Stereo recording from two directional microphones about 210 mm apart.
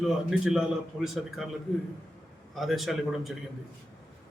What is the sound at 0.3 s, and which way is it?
Speech, centre (ahead or behind).